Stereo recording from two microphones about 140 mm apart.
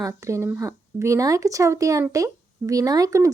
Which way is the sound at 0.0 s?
20° right (ahead or behind).